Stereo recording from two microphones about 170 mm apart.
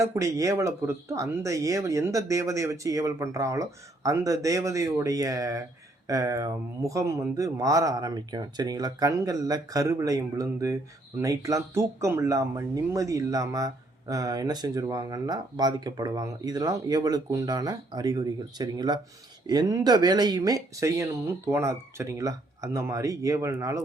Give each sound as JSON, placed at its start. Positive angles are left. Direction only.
{"t": 0.0, "sound": "speech", "side_deg": -20}